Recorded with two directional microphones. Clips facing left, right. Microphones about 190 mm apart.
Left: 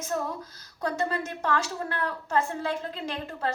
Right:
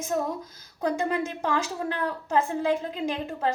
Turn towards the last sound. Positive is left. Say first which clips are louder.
# right 4 dB
turn(degrees=-15)  # may be behind; listen again after turning